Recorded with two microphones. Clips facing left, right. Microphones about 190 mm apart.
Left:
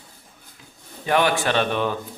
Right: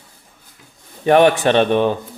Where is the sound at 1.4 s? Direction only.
20° right (ahead or behind).